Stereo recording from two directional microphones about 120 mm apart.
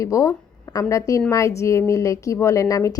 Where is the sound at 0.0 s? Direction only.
25° left (ahead or behind).